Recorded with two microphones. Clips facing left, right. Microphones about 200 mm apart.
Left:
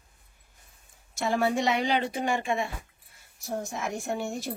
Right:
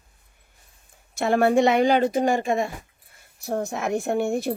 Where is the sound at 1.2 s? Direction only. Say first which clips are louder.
Right 7 dB; 60° right (ahead or behind); by 2.7 s 40° right (ahead or behind).